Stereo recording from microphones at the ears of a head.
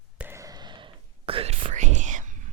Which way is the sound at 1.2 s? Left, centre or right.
Right.